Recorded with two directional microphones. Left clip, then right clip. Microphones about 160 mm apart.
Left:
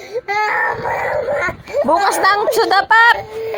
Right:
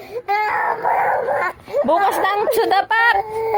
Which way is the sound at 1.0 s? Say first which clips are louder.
Even; 15° right (ahead or behind).